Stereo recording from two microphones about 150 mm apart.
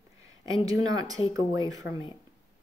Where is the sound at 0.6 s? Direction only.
25° right (ahead or behind).